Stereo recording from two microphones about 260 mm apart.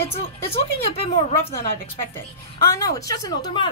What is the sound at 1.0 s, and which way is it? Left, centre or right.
Speech, left.